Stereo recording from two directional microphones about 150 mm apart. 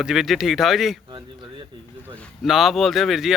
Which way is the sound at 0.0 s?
Centre (ahead or behind).